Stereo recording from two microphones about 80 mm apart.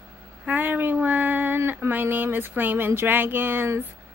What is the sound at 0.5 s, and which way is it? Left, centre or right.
Female singing, right.